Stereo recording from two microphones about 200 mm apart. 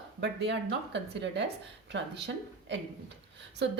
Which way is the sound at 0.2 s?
60° right (ahead or behind).